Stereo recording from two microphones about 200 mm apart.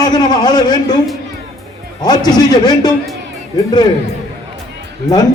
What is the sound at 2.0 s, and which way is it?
Speech, 20° left (ahead or behind).